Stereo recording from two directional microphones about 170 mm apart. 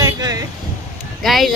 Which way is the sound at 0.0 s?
20° right (ahead or behind).